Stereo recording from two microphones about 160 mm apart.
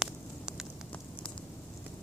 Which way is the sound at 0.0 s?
5° right (ahead or behind).